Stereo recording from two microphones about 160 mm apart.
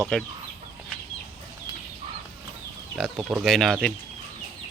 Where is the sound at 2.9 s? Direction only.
5° right (ahead or behind).